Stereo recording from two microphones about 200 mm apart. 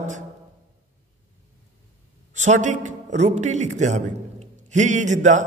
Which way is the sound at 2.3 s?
35° right (ahead or behind).